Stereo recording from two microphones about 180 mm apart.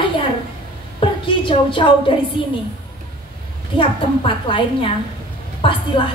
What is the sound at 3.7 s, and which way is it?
A woman's voice, 30° left (ahead or behind).